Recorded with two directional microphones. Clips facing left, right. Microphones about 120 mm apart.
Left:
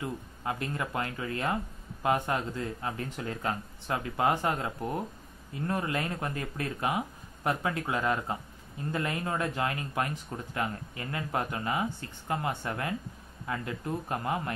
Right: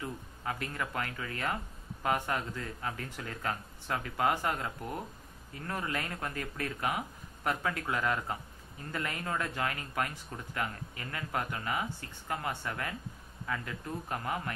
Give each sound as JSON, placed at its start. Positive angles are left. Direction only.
{"t": 0.0, "sound": "speech", "side_deg": 20}